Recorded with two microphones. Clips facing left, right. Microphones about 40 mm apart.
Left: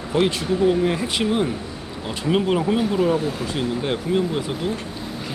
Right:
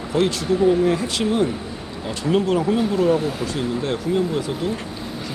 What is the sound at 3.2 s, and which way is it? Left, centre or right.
Speech, centre.